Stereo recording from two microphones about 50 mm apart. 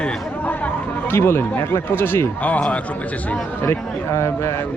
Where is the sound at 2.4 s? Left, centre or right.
Left.